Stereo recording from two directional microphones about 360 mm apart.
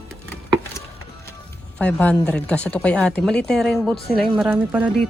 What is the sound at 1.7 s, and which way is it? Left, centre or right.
Speech, centre.